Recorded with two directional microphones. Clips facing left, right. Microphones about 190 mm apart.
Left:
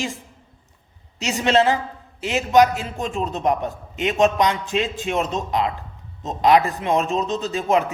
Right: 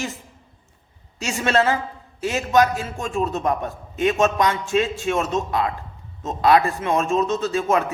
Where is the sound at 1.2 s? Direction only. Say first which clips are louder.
Left 2 dB; 15° left (ahead or behind).